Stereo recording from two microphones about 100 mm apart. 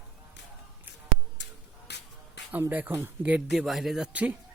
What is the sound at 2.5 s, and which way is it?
Speech, 20° right (ahead or behind).